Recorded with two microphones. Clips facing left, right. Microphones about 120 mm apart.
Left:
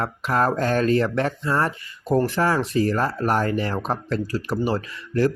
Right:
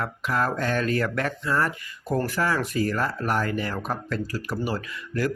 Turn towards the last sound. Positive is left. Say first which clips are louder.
# left 6 dB
turn(degrees=30)  # may be behind; listen again after turning